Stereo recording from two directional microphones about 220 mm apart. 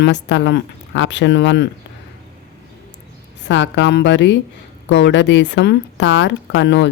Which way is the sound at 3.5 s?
55° left (ahead or behind).